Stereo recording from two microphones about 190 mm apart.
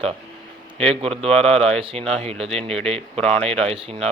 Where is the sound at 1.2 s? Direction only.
5° left (ahead or behind).